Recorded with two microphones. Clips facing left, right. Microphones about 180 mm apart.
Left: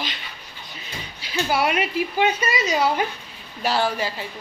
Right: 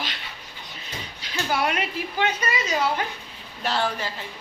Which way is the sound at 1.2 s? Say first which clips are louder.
Left 3 dB; 10° left (ahead or behind).